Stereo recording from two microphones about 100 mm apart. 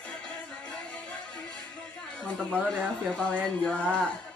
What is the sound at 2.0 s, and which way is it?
Speech, 10° left (ahead or behind).